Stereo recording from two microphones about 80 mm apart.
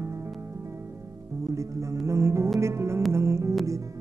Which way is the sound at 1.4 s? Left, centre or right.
Right.